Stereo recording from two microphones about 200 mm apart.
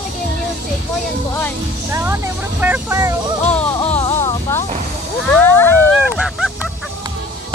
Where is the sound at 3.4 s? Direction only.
10° left (ahead or behind).